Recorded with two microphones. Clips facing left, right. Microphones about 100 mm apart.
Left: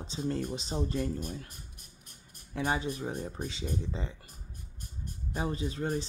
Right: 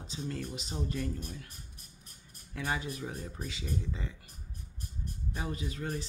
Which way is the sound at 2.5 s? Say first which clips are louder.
Left 4 dB; 25° left (ahead or behind).